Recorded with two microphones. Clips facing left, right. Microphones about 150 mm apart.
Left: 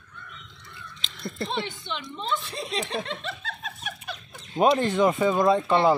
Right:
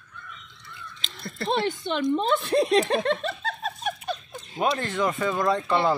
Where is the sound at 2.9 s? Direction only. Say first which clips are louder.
Right 7 dB; 55° right (ahead or behind).